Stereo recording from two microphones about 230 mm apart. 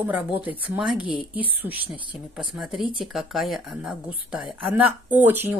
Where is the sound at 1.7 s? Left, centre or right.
Right.